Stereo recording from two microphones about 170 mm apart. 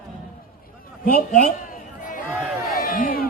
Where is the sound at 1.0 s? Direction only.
55° left (ahead or behind).